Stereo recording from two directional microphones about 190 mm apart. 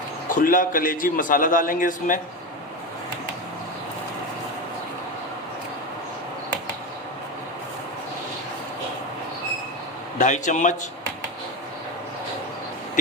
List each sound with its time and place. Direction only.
0.3 s a man's voice: 45° left (ahead or behind)
10.2 s speech: 40° left (ahead or behind)